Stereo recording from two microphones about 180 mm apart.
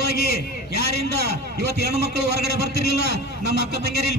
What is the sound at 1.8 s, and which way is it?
A man's voice, 65° right (ahead or behind).